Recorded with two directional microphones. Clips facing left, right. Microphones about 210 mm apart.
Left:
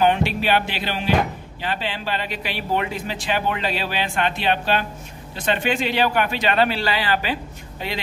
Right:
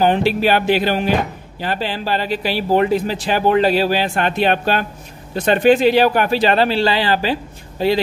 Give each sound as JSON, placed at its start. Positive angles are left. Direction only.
{"t": 0.0, "sound": "music", "side_deg": -35}
{"t": 1.6, "sound": "speech", "side_deg": -40}